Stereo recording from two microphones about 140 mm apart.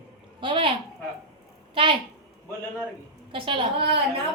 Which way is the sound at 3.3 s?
40° right (ahead or behind).